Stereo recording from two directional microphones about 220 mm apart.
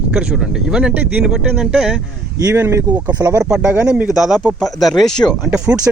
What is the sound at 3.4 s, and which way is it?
Speech, 5° right (ahead or behind).